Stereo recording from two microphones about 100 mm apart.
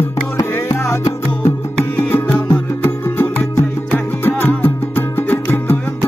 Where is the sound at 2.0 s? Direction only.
20° left (ahead or behind).